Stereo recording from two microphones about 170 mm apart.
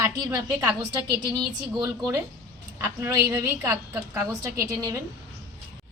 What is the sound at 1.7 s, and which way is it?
A woman's voice, 20° right (ahead or behind).